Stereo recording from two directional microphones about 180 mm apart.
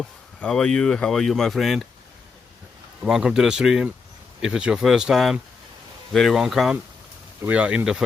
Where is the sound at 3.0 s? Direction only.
5° right (ahead or behind).